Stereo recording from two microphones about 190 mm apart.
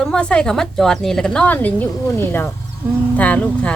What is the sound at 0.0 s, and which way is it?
A woman's voice, 5° left (ahead or behind).